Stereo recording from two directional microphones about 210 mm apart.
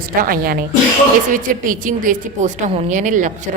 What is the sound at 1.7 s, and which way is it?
A woman's voice, 40° right (ahead or behind).